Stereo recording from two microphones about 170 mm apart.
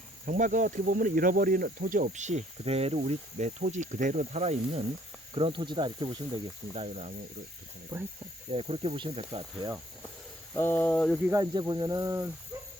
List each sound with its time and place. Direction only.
0.3 s speech: 50° right (ahead or behind); by 6.8 s 30° right (ahead or behind)
6.8 s speech: 40° right (ahead or behind)
8.4 s speech: 35° right (ahead or behind)
9.6 s speech: 20° right (ahead or behind)
10.5 s a sound: 15° left (ahead or behind)
11.2 s speech: 15° right (ahead or behind)
11.5 s speech: 25° right (ahead or behind)